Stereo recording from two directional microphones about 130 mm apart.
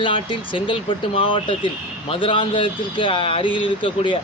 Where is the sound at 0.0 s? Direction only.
40° left (ahead or behind).